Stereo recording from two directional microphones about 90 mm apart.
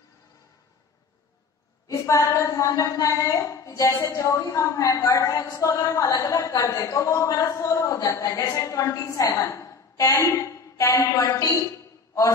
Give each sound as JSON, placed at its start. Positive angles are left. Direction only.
{"t": 1.9, "sound": "a woman's voice", "side_deg": 40}